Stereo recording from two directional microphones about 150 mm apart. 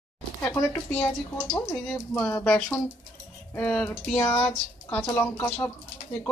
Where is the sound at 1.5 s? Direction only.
15° left (ahead or behind).